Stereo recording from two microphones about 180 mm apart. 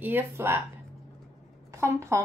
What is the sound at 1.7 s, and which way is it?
Speech, 15° right (ahead or behind).